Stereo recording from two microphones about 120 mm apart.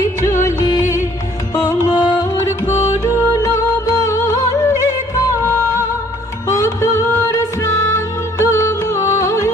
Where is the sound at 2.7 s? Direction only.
70° left (ahead or behind).